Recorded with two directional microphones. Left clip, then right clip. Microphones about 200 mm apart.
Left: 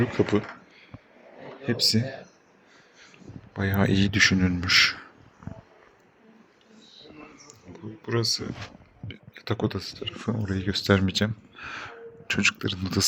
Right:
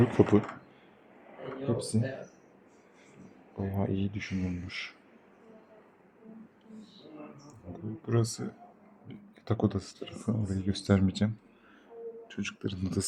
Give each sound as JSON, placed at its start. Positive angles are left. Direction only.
{"t": 0.0, "sound": "speech", "side_deg": -15}
{"t": 1.7, "sound": "speech", "side_deg": 15}
{"t": 3.6, "sound": "speech", "side_deg": 10}
{"t": 7.4, "sound": "a sound", "side_deg": -5}
{"t": 9.0, "sound": "speech", "side_deg": -5}
{"t": 10.4, "sound": "speech", "side_deg": 5}
{"t": 12.3, "sound": "speech", "side_deg": 15}
{"t": 12.5, "sound": "speech", "side_deg": 0}